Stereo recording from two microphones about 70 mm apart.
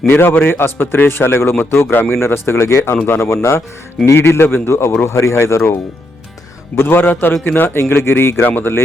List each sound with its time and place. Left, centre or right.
0.1 s a man's voice: left
6.7 s a man's voice: left